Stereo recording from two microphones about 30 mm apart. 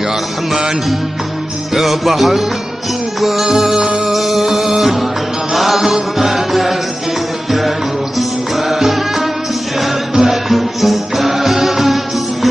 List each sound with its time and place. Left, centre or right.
1.7 s music: centre
3.4 s music: centre
3.7 s music: right
4.1 s music: centre
8.2 s music: centre
10.5 s music: centre